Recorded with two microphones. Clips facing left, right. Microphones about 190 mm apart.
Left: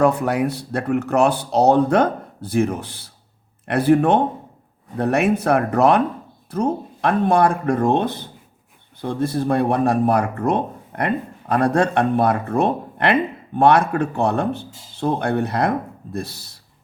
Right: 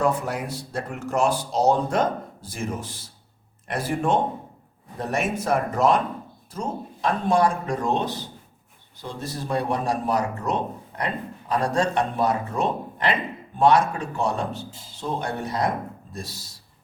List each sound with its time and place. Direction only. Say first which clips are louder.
0.0 s speech: left 7 dB; 65° left (ahead or behind)